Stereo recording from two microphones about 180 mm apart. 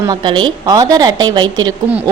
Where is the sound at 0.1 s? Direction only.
25° right (ahead or behind).